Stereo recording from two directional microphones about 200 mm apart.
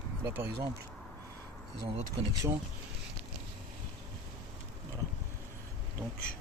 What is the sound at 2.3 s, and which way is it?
Speech, 15° right (ahead or behind).